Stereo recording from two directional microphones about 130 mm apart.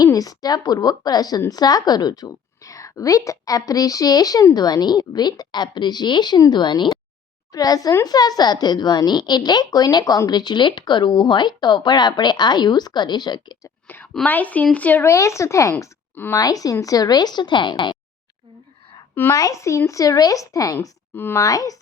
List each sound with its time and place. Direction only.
0.0 s a woman's voice: 30° left (ahead or behind)
13.8 s whispering: 15° left (ahead or behind)
14.3 s a woman's voice: 10° left (ahead or behind); by 17.9 s 35° left (ahead or behind)
19.1 s speech: 20° left (ahead or behind)